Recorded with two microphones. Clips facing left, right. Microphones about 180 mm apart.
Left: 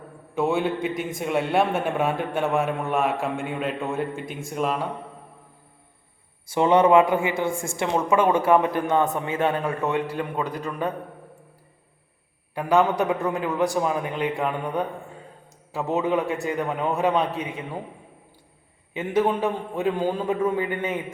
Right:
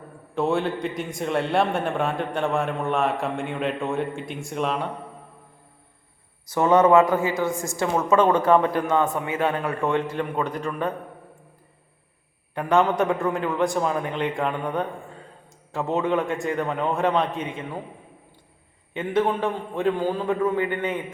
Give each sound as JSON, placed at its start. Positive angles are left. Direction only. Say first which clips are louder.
{"t": 0.3, "sound": "a man's voice", "louder": "even", "side_deg": 5}
{"t": 6.4, "sound": "a man's voice", "louder": "even", "side_deg": 25}
{"t": 8.0, "sound": "a man's voice", "louder": "right 2 dB", "side_deg": 10}
{"t": 12.5, "sound": "a man's voice", "louder": "even", "side_deg": 10}
{"t": 18.9, "sound": "a man's voice", "louder": "even", "side_deg": 10}